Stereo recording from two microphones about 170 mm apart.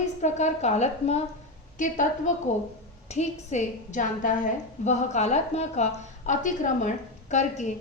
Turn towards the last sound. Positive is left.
turn(degrees=45)  # may be behind; listen again after turning